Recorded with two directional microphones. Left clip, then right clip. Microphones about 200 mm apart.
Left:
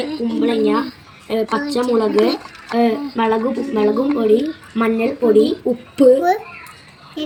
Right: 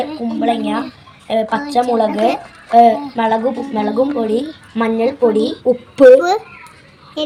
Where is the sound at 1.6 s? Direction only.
55° right (ahead or behind).